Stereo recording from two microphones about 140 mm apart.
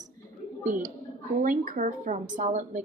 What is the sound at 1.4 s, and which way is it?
A woman's voice, 70° right (ahead or behind).